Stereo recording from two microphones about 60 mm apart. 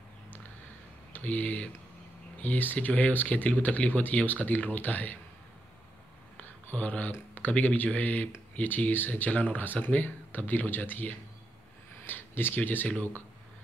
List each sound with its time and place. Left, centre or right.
1.1 s speech: left
6.3 s a sound: left
7.1 s speech: left